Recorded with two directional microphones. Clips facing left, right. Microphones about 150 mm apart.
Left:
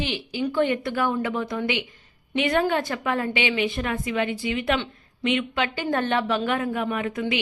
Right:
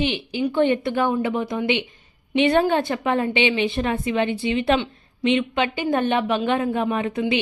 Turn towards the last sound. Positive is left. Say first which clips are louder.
# right 4 dB
turn(degrees=-25)  # may be behind; listen again after turning